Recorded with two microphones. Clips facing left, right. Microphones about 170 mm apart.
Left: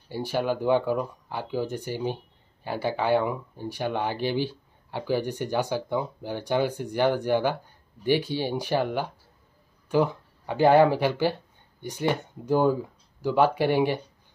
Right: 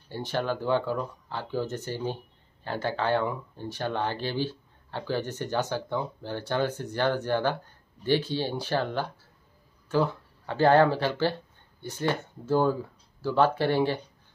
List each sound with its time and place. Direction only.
0.1 s speech: 10° left (ahead or behind)